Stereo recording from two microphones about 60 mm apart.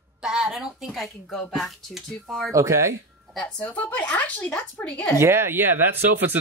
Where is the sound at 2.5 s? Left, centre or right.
Right.